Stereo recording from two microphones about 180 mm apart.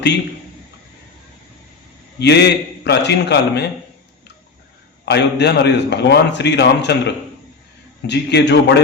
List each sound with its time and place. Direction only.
2.1 s a man's voice: 70° left (ahead or behind)
5.0 s a man's voice: 65° left (ahead or behind)